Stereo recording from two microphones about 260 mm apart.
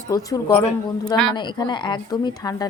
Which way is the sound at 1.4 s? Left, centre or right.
Centre.